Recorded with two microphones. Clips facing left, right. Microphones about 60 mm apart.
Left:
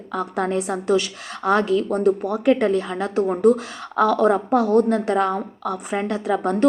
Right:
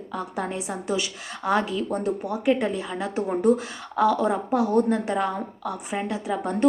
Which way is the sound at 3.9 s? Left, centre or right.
Left.